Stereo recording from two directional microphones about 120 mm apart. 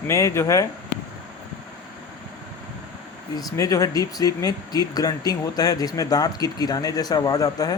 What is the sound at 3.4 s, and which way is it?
Speech, 30° left (ahead or behind).